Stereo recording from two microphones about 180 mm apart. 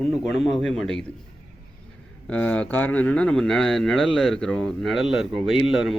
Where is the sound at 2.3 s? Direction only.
5° left (ahead or behind).